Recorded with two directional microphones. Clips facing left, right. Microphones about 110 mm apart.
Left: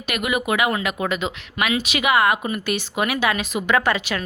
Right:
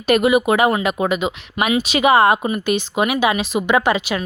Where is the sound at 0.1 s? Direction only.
30° right (ahead or behind).